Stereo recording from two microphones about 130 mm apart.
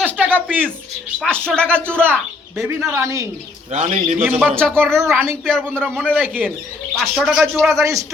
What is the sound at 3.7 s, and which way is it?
Speech, 75° right (ahead or behind).